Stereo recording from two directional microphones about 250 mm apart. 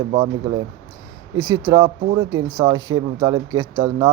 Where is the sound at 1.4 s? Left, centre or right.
Centre.